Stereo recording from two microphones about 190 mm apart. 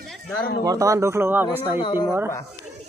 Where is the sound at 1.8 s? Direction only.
20° left (ahead or behind).